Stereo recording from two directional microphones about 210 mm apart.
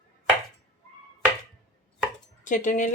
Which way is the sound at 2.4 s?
35° left (ahead or behind).